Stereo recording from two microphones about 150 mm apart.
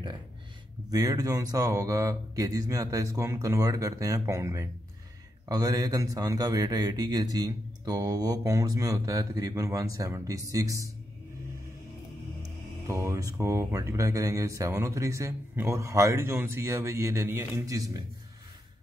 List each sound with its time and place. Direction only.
0.8 s speech: 25° right (ahead or behind)
12.8 s speech: 20° right (ahead or behind)